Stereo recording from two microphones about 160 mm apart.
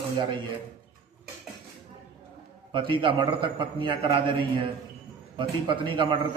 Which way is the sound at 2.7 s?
30° right (ahead or behind).